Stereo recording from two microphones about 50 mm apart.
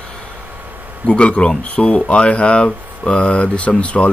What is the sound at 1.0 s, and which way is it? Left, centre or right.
Speech, left.